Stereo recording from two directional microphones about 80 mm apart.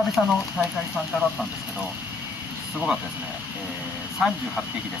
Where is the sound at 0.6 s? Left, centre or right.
Centre.